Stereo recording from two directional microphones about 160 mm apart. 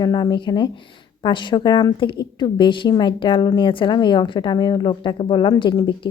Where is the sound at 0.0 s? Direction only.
25° left (ahead or behind).